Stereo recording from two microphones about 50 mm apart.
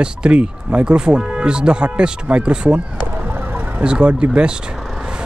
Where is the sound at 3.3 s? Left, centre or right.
Right.